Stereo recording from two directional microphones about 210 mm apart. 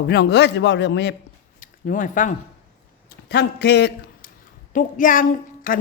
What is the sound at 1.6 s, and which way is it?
Speech, 40° left (ahead or behind).